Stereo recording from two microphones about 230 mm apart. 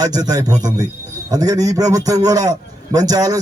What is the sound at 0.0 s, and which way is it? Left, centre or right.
A man's voice, centre.